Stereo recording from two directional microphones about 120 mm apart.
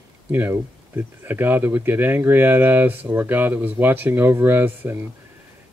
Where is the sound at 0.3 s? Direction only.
20° right (ahead or behind).